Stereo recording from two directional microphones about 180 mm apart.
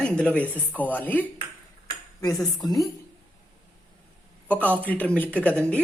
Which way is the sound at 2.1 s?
20° left (ahead or behind).